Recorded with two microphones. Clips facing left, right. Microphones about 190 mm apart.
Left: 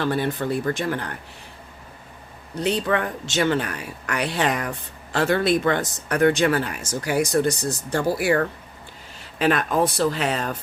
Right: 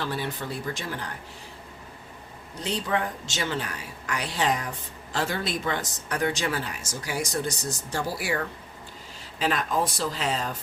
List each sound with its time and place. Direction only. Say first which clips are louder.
0.0 s speech: left 8 dB; 55° left (ahead or behind)
2.6 s speech: left 5 dB; 65° left (ahead or behind)